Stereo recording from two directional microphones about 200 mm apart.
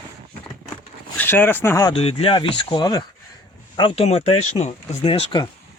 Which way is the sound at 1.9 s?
30° left (ahead or behind).